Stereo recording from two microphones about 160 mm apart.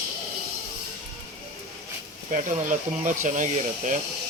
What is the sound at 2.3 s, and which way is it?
Speech, 55° right (ahead or behind).